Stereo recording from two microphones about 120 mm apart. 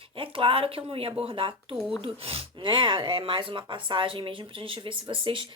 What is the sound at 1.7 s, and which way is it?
Speech, centre (ahead or behind).